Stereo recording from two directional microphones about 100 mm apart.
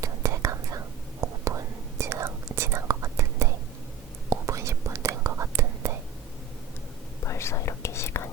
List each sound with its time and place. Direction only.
0.0 s whispering: 30° right (ahead or behind)
7.3 s whispering: 30° left (ahead or behind)